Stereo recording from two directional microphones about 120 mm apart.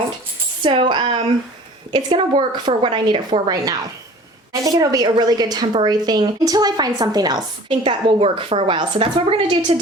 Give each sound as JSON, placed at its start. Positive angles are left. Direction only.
{"t": 0.6, "sound": "a woman's voice", "side_deg": -45}